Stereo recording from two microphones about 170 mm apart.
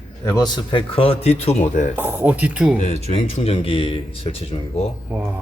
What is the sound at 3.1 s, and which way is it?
Speech, 35° left (ahead or behind).